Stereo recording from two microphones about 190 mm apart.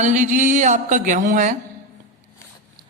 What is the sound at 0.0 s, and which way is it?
A man's voice, 40° right (ahead or behind).